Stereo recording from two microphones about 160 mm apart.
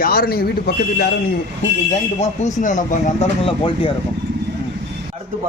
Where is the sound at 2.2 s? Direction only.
50° left (ahead or behind).